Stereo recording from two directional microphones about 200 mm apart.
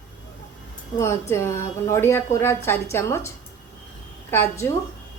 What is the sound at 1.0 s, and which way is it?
A woman's voice, 15° left (ahead or behind).